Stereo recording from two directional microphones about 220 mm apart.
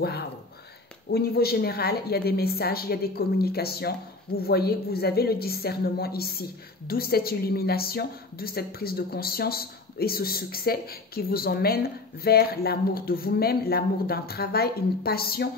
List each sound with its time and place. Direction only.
1.1 s a woman's voice: 45° left (ahead or behind)